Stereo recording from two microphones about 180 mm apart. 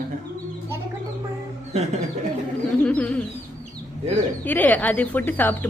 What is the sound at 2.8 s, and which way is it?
Bird, 5° left (ahead or behind).